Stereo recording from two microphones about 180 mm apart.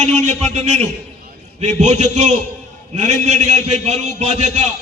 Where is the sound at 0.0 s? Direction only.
40° right (ahead or behind).